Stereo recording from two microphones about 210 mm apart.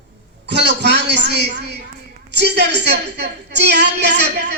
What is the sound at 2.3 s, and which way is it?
A woman's voice, 50° right (ahead or behind).